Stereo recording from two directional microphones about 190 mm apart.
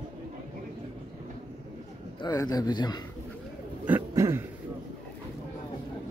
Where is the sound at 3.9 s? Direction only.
15° right (ahead or behind).